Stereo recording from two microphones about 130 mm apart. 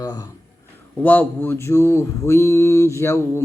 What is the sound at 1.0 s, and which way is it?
Mantra, 15° left (ahead or behind).